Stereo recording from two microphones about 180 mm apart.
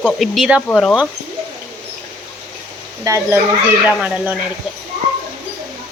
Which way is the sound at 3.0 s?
15° right (ahead or behind).